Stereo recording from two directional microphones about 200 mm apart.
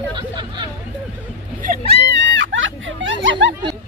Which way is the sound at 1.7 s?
40° right (ahead or behind).